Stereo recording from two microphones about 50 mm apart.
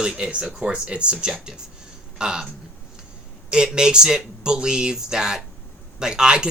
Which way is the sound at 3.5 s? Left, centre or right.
Centre.